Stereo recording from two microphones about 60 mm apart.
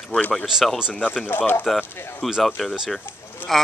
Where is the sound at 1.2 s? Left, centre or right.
Left.